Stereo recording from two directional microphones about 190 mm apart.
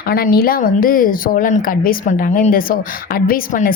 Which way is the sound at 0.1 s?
50° left (ahead or behind).